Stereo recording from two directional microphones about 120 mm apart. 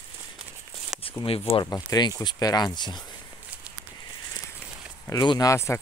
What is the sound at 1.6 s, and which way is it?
Speech, 35° left (ahead or behind).